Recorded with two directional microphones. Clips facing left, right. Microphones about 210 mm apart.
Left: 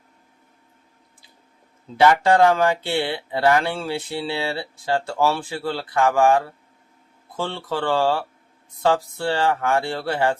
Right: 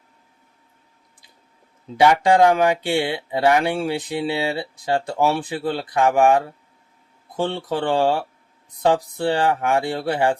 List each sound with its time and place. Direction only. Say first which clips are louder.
2.0 s speech: right 1 dB; 15° right (ahead or behind)